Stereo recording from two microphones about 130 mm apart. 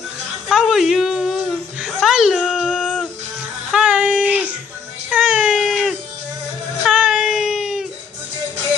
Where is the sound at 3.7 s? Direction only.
10° right (ahead or behind).